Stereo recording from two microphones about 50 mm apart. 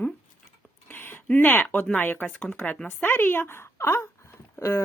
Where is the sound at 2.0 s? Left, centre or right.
Left.